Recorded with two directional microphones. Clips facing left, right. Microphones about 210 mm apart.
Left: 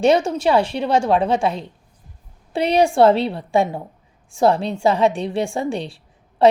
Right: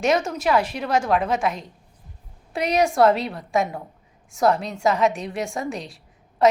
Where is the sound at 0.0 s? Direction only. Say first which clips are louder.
Left 5 dB; 30° left (ahead or behind).